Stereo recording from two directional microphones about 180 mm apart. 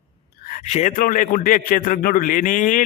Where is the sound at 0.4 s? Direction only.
45° left (ahead or behind).